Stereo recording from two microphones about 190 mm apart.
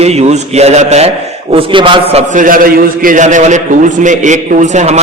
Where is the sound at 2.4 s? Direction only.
45° right (ahead or behind).